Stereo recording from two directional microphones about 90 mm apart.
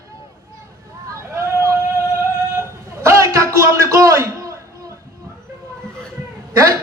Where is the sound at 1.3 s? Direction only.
30° right (ahead or behind).